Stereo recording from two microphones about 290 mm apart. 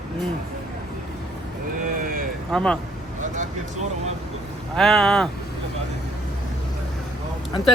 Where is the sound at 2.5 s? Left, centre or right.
Centre.